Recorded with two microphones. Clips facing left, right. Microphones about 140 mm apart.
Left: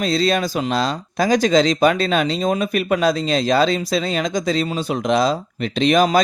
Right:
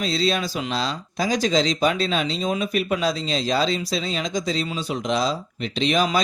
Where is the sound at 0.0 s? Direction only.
50° left (ahead or behind).